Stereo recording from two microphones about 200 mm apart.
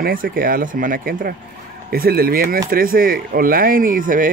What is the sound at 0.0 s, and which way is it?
Speech, 45° right (ahead or behind).